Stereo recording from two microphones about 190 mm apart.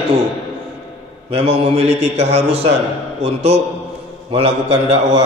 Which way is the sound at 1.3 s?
30° right (ahead or behind).